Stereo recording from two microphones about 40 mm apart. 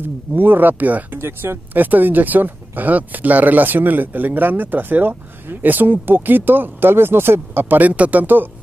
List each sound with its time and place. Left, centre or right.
0.4 s speech: right
1.1 s speech: right
1.7 s speech: right
7.8 s speech: right